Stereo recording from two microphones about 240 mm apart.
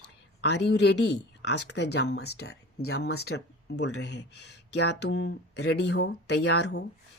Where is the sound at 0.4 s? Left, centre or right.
Left.